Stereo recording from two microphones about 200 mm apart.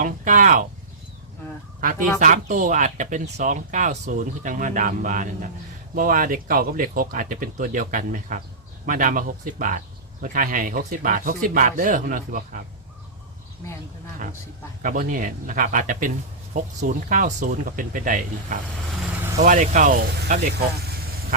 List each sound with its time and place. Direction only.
0.0 s speech: 40° right (ahead or behind)
1.8 s speech: 40° right (ahead or behind)
14.8 s speech: 40° right (ahead or behind)